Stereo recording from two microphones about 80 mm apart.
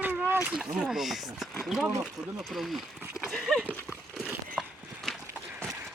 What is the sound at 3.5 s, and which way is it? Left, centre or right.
Horse, centre.